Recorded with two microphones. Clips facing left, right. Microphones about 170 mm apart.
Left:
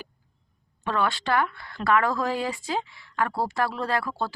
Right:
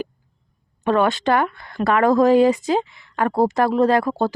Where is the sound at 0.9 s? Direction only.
20° right (ahead or behind).